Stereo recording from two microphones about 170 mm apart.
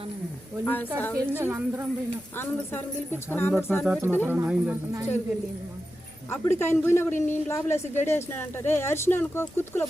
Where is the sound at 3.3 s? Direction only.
10° left (ahead or behind).